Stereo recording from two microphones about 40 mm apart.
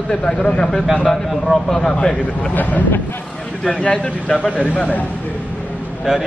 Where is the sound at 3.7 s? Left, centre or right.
Left.